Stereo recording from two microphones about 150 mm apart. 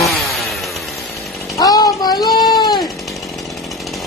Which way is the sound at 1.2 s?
Centre (ahead or behind).